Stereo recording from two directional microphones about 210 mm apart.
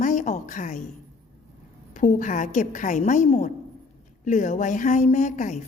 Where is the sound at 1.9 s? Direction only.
35° left (ahead or behind).